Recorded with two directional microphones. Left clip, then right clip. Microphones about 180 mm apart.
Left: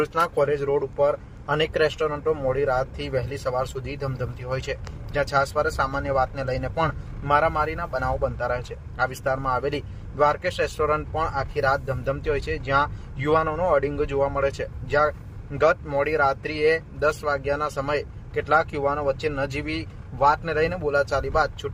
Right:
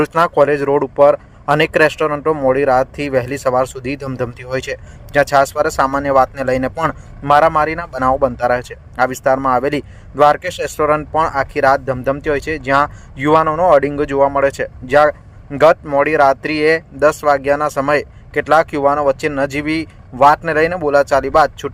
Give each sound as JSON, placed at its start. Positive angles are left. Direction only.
{"t": 0.0, "sound": "speech", "side_deg": -40}